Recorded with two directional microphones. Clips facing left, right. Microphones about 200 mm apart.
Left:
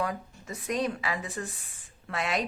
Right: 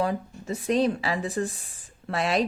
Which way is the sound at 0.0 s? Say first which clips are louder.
Right 5 dB; 30° right (ahead or behind).